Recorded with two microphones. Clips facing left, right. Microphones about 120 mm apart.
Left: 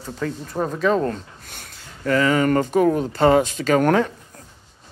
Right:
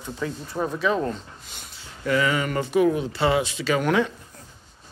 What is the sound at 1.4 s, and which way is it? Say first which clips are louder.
Speech: left 2 dB; 55° left (ahead or behind).